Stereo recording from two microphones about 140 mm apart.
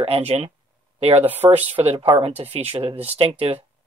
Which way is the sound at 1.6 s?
45° right (ahead or behind).